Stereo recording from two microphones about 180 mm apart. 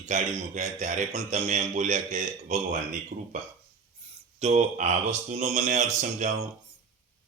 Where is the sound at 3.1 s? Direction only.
55° right (ahead or behind).